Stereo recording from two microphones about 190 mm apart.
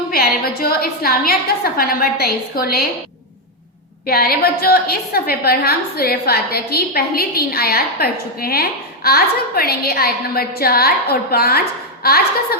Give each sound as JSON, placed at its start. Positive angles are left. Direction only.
{"t": 0.1, "sound": "a woman's voice", "side_deg": 55}
{"t": 4.0, "sound": "a woman's voice", "side_deg": 55}